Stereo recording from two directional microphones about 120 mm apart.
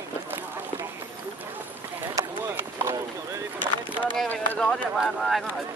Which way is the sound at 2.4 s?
15° right (ahead or behind).